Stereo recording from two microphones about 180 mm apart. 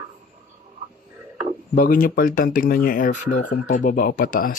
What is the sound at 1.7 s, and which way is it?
Speech, 50° left (ahead or behind).